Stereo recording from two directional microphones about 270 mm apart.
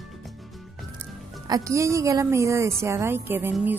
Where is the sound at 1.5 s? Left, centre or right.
Centre.